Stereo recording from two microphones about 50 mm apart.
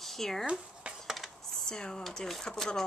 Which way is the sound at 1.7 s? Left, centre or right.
Centre.